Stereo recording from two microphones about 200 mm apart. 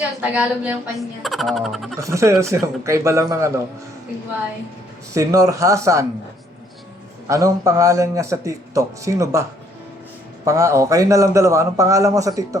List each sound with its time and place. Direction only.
0.2 s speech: 5° right (ahead or behind)
2.0 s a man's voice: 15° right (ahead or behind)
5.1 s a man's voice: 15° right (ahead or behind)
7.3 s a man's voice: 15° right (ahead or behind)
10.4 s a man's voice: 15° right (ahead or behind)